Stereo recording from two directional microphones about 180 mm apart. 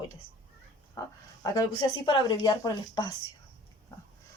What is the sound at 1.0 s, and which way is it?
Speech, 20° left (ahead or behind).